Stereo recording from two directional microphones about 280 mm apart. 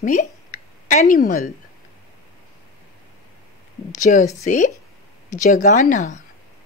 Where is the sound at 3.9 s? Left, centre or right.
Left.